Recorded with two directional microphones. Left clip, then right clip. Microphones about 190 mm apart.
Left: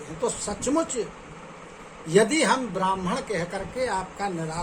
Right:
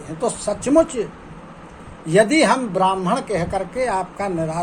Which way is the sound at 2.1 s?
15° right (ahead or behind).